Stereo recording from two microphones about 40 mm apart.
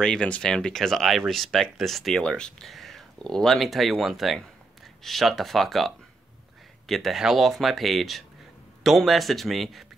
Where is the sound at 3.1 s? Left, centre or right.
Centre.